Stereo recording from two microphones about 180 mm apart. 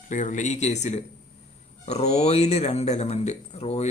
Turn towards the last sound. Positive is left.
turn(degrees=35)  # may be behind; listen again after turning